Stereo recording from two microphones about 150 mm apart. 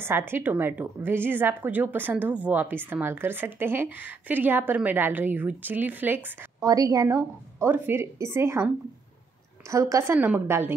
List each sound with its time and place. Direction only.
0.3 s a woman's voice: 15° right (ahead or behind)
6.6 s a woman's voice: 25° right (ahead or behind)